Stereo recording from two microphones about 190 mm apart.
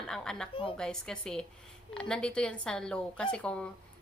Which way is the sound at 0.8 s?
5° left (ahead or behind).